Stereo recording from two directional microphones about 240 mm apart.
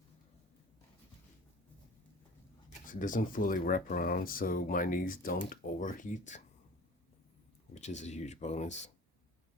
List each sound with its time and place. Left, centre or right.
2.8 s speech: left
7.7 s speech: left